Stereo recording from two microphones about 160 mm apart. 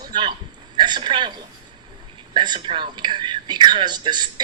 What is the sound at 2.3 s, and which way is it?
Speech, 30° right (ahead or behind).